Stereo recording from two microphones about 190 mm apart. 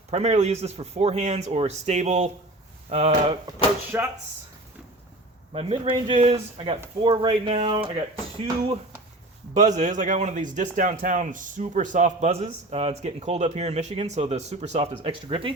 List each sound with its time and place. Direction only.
0.1 s speech: 35° right (ahead or behind)
3.9 s speech: 10° right (ahead or behind)
5.5 s speech: 30° right (ahead or behind)
9.6 s speech: 40° right (ahead or behind)